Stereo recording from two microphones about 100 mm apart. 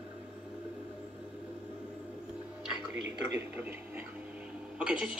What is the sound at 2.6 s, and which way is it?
A man's voice, 15° right (ahead or behind).